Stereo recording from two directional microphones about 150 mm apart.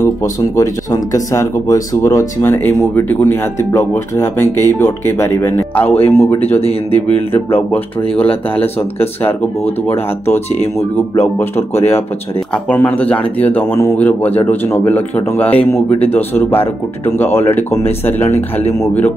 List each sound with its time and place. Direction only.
0.0 s speech: 20° left (ahead or behind)
5.9 s speech: 40° left (ahead or behind)
7.5 s speech: 10° left (ahead or behind)
8.3 s speech: 40° left (ahead or behind)
9.2 s speech: 15° left (ahead or behind)